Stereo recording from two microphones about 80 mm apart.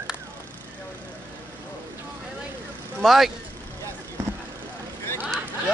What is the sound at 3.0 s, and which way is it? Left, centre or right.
Speech, centre.